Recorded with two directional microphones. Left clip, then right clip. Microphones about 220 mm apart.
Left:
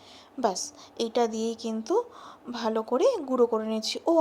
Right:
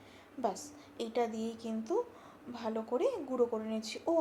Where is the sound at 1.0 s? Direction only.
40° left (ahead or behind).